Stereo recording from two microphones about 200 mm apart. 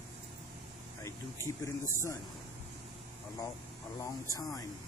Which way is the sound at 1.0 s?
15° left (ahead or behind).